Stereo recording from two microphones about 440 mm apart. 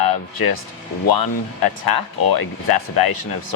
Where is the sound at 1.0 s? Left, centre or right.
Left.